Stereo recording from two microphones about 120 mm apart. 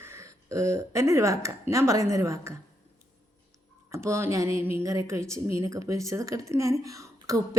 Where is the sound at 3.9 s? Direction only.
20° right (ahead or behind).